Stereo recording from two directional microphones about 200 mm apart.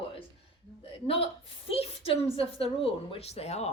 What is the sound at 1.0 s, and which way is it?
Speech, 30° left (ahead or behind).